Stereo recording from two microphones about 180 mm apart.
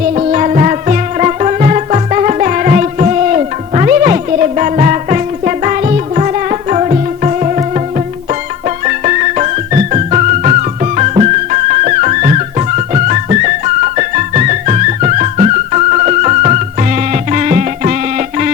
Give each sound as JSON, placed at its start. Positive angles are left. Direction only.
{"t": 0.2, "sound": "music", "side_deg": -40}